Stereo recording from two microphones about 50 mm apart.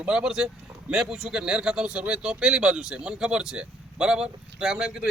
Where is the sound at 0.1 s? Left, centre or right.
Centre.